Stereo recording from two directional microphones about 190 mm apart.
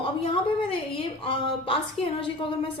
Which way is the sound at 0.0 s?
30° left (ahead or behind).